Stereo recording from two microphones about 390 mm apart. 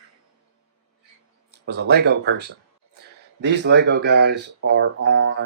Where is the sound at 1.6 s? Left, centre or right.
Right.